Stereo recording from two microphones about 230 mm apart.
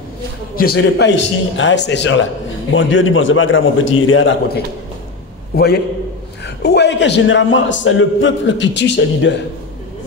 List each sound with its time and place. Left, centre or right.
0.6 s a man's voice: left
5.5 s a man's voice: left